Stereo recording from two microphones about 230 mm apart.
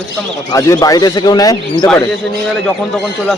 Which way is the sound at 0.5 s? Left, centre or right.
Centre.